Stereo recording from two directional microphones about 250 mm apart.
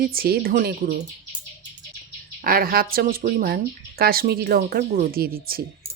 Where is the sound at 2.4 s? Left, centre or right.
Right.